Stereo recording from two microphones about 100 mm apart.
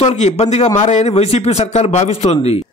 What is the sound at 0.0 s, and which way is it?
A man's voice, 90° left.